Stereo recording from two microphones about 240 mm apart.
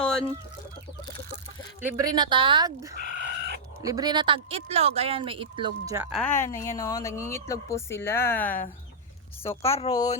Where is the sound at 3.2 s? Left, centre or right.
Right.